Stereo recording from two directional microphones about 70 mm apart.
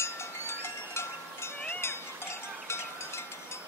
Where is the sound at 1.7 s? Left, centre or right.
Left.